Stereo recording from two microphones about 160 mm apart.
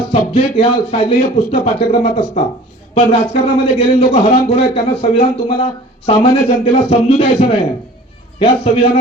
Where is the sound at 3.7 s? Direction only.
40° left (ahead or behind).